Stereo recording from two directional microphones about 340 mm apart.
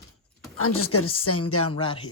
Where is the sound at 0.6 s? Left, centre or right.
Left.